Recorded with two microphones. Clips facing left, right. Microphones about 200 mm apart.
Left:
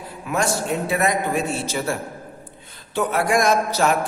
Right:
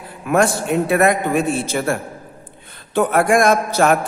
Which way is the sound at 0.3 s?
55° right (ahead or behind).